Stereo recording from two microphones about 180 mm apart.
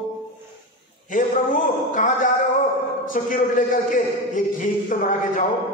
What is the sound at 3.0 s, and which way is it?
A man's voice, 50° left (ahead or behind).